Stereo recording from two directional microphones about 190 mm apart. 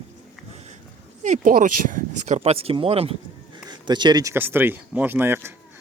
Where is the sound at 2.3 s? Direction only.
30° right (ahead or behind); by 5.5 s 10° right (ahead or behind).